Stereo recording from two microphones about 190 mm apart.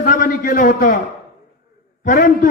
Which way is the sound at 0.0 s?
45° left (ahead or behind).